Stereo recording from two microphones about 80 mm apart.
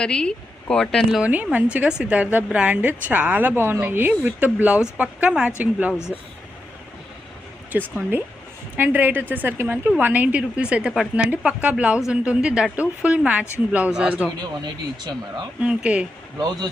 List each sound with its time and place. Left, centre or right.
0.0 s speech: centre
1.2 s a woman's voice: centre
6.1 s speech: centre
7.7 s a woman's voice: right
14.6 s speech: right
15.6 s a woman's voice: centre
16.4 s speech: right